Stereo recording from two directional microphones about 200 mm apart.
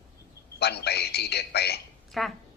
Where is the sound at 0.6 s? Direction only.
55° left (ahead or behind).